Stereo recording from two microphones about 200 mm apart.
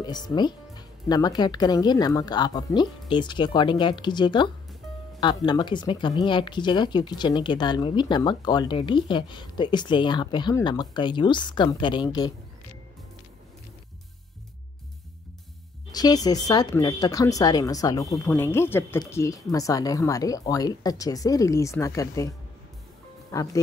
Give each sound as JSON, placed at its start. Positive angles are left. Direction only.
{"t": 0.0, "sound": "speech", "side_deg": 20}
{"t": 15.9, "sound": "speech", "side_deg": 20}
{"t": 18.0, "sound": "speech", "side_deg": 0}
{"t": 18.3, "sound": "speech", "side_deg": 10}
{"t": 23.3, "sound": "speech", "side_deg": 15}